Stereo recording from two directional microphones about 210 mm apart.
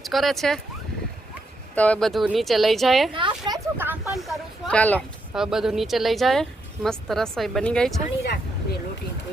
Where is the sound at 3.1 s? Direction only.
25° right (ahead or behind).